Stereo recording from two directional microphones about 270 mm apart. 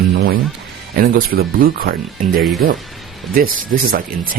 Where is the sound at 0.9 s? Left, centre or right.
Right.